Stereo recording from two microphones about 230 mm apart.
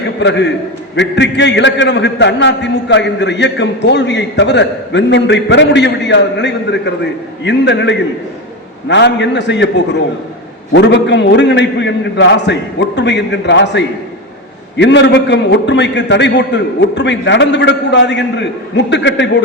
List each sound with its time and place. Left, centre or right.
0.2 s a man's voice: left